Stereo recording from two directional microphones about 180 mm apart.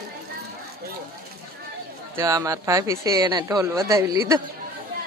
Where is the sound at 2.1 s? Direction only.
20° right (ahead or behind).